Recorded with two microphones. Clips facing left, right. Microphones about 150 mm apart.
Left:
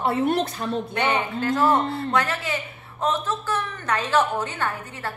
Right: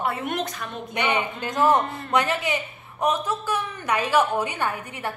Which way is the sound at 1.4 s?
20° right (ahead or behind).